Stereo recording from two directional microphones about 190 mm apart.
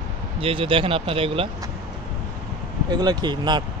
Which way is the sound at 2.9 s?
20° right (ahead or behind).